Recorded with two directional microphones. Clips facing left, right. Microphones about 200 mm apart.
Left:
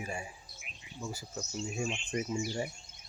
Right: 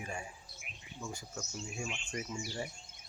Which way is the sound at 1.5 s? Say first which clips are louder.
Left 7 dB; 25° left (ahead or behind).